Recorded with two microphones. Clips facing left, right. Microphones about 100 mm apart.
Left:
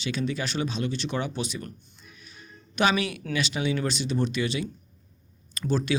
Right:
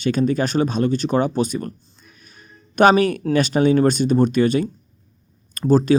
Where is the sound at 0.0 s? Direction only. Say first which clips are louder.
Right 10 dB; 45° right (ahead or behind).